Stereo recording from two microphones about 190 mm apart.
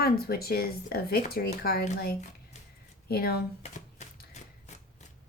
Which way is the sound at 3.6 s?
35° left (ahead or behind).